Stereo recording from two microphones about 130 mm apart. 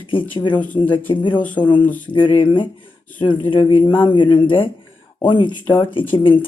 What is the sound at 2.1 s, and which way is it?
Speech, 35° left (ahead or behind).